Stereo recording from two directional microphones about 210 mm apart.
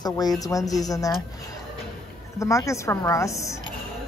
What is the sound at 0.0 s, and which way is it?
A woman's voice, 20° left (ahead or behind).